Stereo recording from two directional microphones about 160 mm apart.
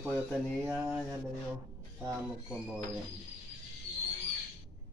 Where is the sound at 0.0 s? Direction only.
10° right (ahead or behind).